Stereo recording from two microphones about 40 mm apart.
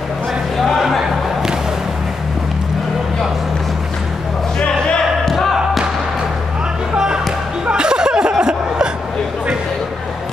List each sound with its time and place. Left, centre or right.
0.6 s a sound: centre
4.6 s music: left
5.3 s music: centre
7.6 s chuckle: right